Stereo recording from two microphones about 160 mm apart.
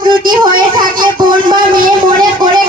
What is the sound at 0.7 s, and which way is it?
Music, 60° right (ahead or behind).